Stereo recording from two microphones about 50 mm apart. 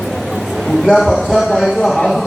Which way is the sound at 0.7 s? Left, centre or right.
Centre.